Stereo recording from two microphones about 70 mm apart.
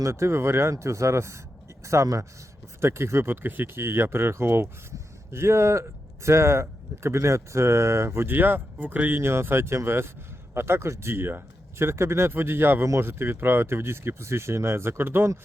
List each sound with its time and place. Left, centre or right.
0.0 s speech: right